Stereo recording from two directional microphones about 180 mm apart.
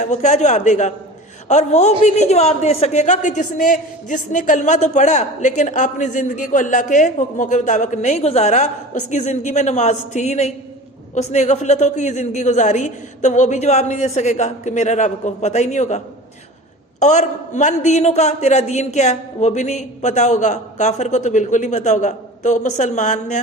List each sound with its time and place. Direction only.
0.0 s a man's voice: 40° left (ahead or behind)
17.0 s a man's voice: 40° left (ahead or behind)